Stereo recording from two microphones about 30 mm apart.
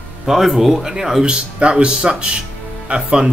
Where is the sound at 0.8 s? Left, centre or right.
Centre.